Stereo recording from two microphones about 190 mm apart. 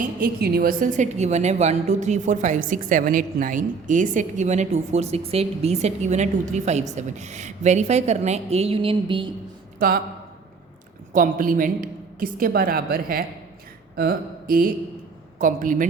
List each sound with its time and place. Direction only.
0.0 s a woman's voice: 50° right (ahead or behind); by 9.3 s 25° right (ahead or behind)
9.7 s speech: 50° right (ahead or behind)
11.1 s a woman's voice: 45° right (ahead or behind)